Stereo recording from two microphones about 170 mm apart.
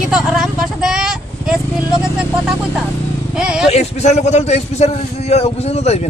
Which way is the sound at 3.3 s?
5° right (ahead or behind).